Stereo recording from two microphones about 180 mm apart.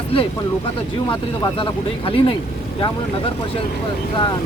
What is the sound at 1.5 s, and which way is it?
Speech, 30° left (ahead or behind).